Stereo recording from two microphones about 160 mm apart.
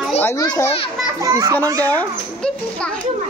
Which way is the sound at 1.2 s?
20° right (ahead or behind).